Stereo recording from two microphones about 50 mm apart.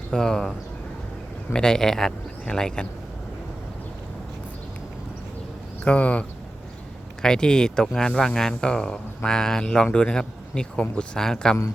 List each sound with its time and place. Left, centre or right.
0.1 s speech: centre
1.5 s speech: centre
5.8 s speech: left
7.2 s speech: centre